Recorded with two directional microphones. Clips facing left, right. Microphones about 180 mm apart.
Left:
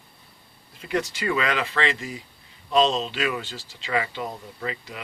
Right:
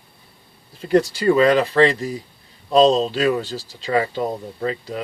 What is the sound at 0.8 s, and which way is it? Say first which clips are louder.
Speech: right 10 dB; 35° right (ahead or behind).